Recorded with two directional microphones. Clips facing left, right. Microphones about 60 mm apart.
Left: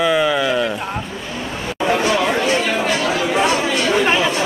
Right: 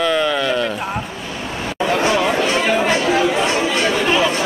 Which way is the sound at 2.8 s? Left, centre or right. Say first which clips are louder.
Right 3 dB; right.